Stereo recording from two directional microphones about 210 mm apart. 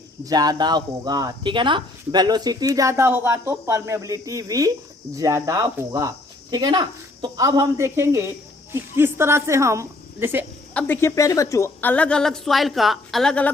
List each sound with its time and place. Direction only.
0.3 s a woman's voice: 20° right (ahead or behind)
10.8 s a woman's voice: 10° left (ahead or behind)